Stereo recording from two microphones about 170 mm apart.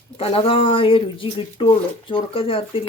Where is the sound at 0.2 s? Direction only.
35° left (ahead or behind).